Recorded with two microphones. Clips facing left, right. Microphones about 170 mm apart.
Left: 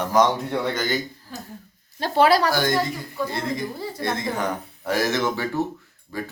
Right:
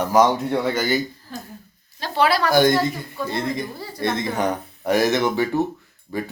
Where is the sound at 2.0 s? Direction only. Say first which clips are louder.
Left 2 dB; 45° left (ahead or behind).